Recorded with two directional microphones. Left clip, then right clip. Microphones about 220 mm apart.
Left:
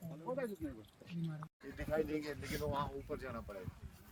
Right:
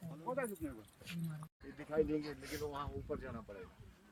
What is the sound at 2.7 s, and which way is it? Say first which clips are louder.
Speech: left 3 dB; 55° left (ahead or behind).